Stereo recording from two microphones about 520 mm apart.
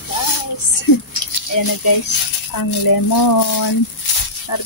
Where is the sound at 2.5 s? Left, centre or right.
Left.